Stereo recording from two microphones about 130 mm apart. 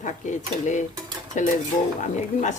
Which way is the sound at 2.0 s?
70° left (ahead or behind).